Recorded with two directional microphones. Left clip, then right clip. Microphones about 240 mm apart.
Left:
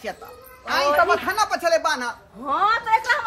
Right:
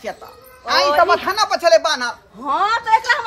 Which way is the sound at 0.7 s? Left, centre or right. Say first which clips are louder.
Right 4 dB; right.